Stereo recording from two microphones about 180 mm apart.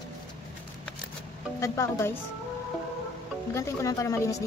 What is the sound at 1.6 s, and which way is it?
Speech, 15° left (ahead or behind).